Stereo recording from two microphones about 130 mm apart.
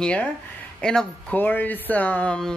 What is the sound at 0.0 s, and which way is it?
A woman's voice, 10° left (ahead or behind).